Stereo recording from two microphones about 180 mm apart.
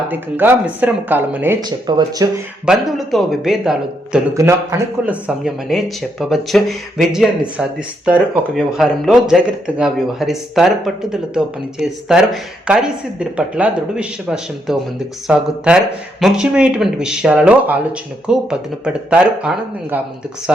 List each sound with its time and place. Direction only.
0.1 s speech: 10° right (ahead or behind)
1.6 s speech: 25° right (ahead or behind)
2.6 s speech: centre (ahead or behind)
4.4 s speech: 15° right (ahead or behind)